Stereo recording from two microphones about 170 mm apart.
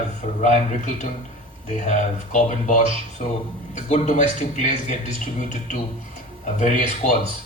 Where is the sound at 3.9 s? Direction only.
45° left (ahead or behind).